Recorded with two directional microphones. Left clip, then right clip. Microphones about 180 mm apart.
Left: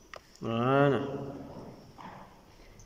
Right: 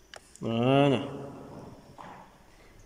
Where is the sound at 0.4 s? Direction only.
20° right (ahead or behind).